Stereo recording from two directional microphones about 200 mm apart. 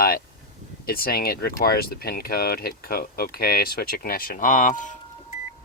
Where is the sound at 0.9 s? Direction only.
50° left (ahead or behind).